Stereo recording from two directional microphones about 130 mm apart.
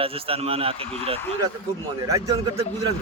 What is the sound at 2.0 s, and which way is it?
Speech, 25° right (ahead or behind).